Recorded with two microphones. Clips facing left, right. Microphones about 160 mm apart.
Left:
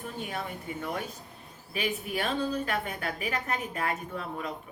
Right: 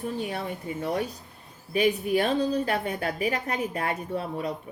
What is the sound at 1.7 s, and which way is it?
A woman's voice, 35° right (ahead or behind).